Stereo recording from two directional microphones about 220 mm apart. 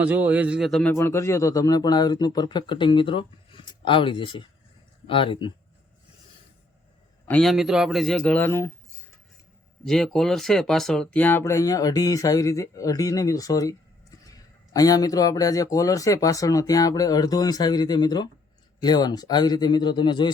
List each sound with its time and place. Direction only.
0.0 s a man's voice: 5° right (ahead or behind); by 5.5 s 25° left (ahead or behind)
7.3 s a man's voice: 5° left (ahead or behind)
9.8 s a man's voice: centre (ahead or behind); by 20.3 s 20° left (ahead or behind)